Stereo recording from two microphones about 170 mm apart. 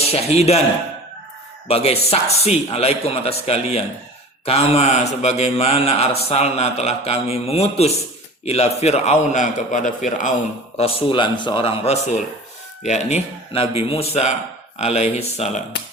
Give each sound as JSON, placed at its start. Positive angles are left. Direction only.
{"t": 0.1, "sound": "a man's voice", "side_deg": 40}
{"t": 1.6, "sound": "a man's voice", "side_deg": 35}
{"t": 10.8, "sound": "a man's voice", "side_deg": 30}